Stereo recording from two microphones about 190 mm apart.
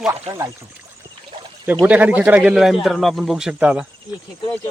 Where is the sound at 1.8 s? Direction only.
10° right (ahead or behind).